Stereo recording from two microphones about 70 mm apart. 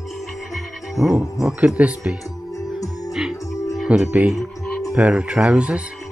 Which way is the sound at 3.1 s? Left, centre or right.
Centre.